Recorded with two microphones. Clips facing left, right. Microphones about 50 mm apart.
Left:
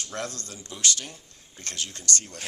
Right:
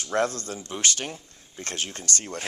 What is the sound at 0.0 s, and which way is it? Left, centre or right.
Speech, right.